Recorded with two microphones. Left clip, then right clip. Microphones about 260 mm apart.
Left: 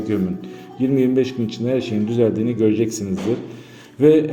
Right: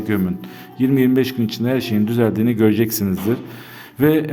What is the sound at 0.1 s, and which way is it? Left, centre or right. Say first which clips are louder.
A man's voice: right 2 dB; right.